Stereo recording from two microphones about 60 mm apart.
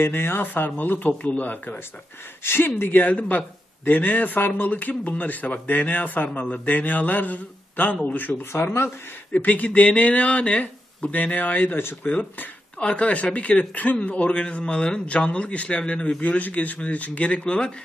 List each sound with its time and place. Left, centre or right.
0.0 s speech: left
2.4 s speech: left
12.1 s speech: left